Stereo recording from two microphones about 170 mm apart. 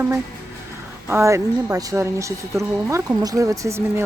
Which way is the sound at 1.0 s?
15° right (ahead or behind).